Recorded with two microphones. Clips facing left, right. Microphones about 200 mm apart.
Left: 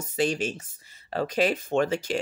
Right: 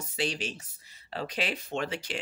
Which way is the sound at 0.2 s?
45° left (ahead or behind).